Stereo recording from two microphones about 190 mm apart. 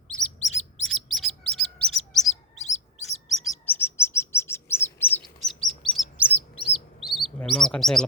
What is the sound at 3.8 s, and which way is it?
Chirp, 10° left (ahead or behind).